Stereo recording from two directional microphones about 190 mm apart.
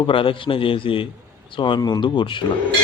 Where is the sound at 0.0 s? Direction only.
30° left (ahead or behind).